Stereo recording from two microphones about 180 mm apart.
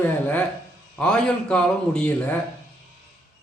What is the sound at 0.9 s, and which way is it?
A man's voice, 5° left (ahead or behind).